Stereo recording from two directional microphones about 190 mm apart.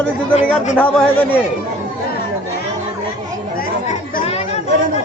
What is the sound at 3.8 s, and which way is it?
Chatter, 35° left (ahead or behind).